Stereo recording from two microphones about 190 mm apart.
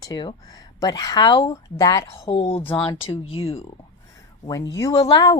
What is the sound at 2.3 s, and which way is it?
Speech, 30° left (ahead or behind).